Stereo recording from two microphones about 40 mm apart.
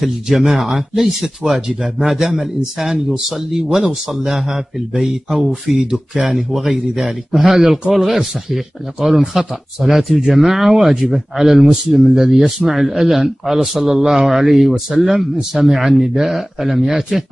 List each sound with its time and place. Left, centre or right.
0.0 s speech: centre
5.9 s speech: centre
6.3 s speech: centre